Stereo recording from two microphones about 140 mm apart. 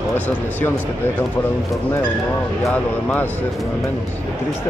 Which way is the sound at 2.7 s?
10° left (ahead or behind).